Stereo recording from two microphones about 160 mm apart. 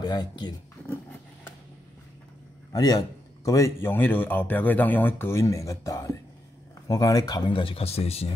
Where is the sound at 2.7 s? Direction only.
25° left (ahead or behind); by 8.4 s 40° left (ahead or behind).